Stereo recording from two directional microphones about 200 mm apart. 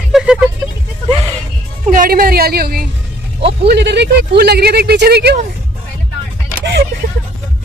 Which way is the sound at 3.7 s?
60° right (ahead or behind).